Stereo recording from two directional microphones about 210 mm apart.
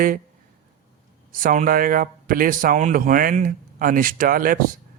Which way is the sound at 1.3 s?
40° right (ahead or behind).